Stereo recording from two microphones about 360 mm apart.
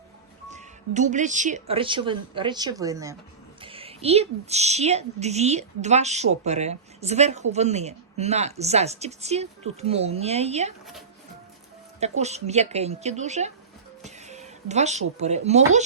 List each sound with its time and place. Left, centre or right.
0.5 s a woman's voice: centre
11.9 s a woman's voice: centre